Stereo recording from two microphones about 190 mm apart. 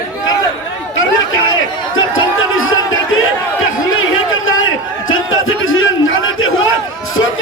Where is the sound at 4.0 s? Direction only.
90° left.